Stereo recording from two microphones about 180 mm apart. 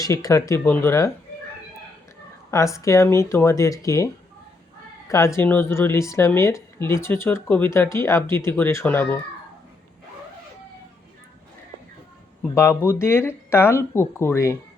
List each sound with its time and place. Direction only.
0.0 s speech: 20° left (ahead or behind)
2.5 s speech: 15° left (ahead or behind)
12.5 s speech: 15° left (ahead or behind)